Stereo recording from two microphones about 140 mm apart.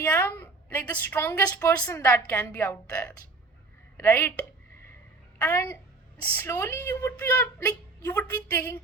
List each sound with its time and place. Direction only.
0.0 s a woman's voice: 15° left (ahead or behind)